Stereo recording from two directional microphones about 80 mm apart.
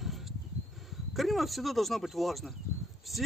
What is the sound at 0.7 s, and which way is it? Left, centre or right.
Speech, centre.